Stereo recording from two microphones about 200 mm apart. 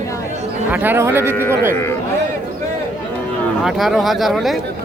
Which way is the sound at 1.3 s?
10° left (ahead or behind).